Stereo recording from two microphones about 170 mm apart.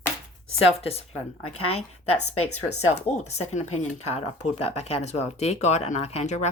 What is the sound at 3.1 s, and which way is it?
Speech, 40° left (ahead or behind).